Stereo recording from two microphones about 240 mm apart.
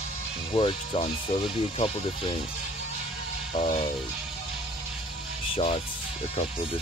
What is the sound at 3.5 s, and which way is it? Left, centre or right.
Speech, left.